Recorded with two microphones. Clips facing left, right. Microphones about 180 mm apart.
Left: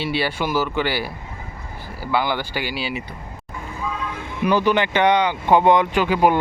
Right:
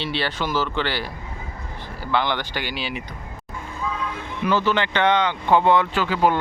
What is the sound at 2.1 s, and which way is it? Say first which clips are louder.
Speech: left 1 dB; 10° left (ahead or behind).